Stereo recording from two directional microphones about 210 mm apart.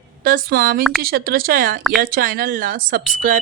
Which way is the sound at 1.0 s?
45° right (ahead or behind).